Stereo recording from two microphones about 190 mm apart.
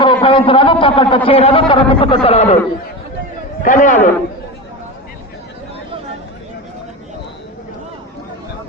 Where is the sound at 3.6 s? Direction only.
40° left (ahead or behind).